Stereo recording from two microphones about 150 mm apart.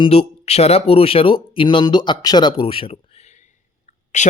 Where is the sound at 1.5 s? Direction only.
35° left (ahead or behind); by 4.2 s 50° left (ahead or behind).